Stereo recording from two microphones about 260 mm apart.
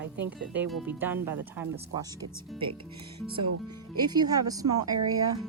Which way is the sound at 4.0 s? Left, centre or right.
Centre.